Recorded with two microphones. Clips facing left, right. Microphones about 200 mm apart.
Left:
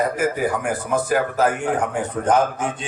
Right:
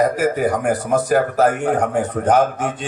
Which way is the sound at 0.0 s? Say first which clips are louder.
Right 4 dB; 45° right (ahead or behind).